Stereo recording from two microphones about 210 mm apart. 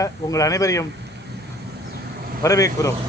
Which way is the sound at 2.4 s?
15° left (ahead or behind).